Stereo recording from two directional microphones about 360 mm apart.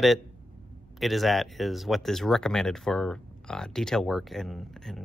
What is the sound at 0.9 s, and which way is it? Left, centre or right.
Speech, centre.